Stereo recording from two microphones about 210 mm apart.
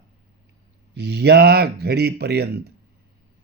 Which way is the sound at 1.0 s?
50° right (ahead or behind).